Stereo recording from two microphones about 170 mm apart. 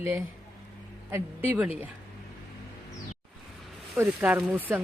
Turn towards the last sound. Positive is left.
turn(degrees=-10)  # may be behind; listen again after turning